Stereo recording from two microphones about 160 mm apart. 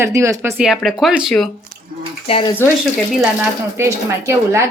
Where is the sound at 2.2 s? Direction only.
35° left (ahead or behind).